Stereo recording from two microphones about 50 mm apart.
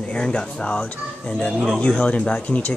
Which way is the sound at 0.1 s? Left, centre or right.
Centre.